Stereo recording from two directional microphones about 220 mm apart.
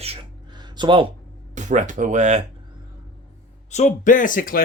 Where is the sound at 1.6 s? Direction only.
35° right (ahead or behind).